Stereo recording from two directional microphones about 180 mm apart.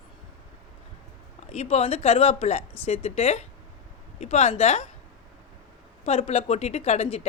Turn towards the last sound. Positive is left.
turn(degrees=35)  # may be behind; listen again after turning